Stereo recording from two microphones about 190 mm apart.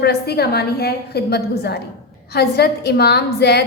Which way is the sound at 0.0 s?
60° left (ahead or behind).